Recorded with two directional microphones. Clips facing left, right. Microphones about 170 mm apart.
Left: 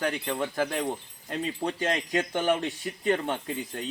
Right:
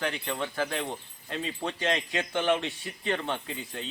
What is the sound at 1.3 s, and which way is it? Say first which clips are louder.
Speech: left 3 dB; 40° left (ahead or behind).